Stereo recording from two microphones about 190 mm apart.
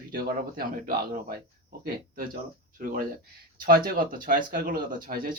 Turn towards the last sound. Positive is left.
turn(degrees=-50)  # may be behind; listen again after turning